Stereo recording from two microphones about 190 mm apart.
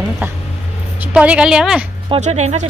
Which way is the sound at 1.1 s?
5° right (ahead or behind).